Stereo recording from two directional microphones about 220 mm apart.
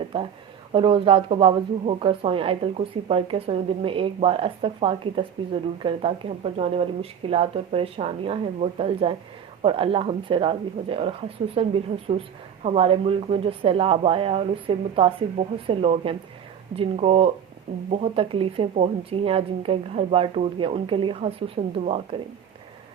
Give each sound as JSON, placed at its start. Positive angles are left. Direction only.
{"t": 0.1, "sound": "speech", "side_deg": -25}